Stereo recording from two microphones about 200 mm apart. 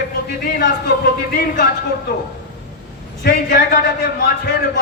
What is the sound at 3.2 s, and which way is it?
Speech, 45° left (ahead or behind).